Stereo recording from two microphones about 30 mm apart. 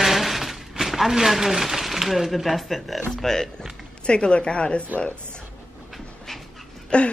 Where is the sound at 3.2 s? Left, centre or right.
Centre.